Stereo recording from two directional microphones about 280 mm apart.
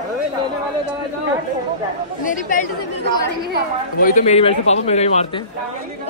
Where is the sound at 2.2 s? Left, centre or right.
Left.